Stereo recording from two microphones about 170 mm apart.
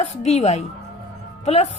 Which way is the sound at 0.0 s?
40° left (ahead or behind).